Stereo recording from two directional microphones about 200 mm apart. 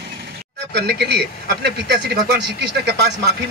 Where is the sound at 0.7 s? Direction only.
55° right (ahead or behind).